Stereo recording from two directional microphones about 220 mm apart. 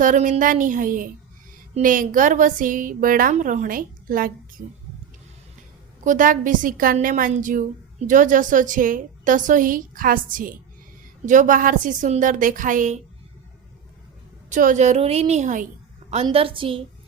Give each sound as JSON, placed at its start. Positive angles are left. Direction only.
{"t": 0.0, "sound": "a woman's voice", "side_deg": -35}
{"t": 6.1, "sound": "a woman's voice", "side_deg": -35}
{"t": 14.5, "sound": "a woman's voice", "side_deg": -35}